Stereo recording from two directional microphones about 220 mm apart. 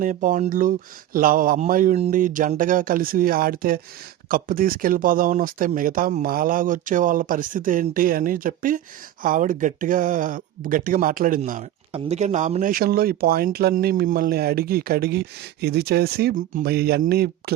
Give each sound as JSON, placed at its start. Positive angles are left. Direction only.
{"t": 0.0, "sound": "speech", "side_deg": -35}
{"t": 11.9, "sound": "speech", "side_deg": -25}